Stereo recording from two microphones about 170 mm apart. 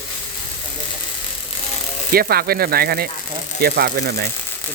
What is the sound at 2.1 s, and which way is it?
Speech, 65° right (ahead or behind).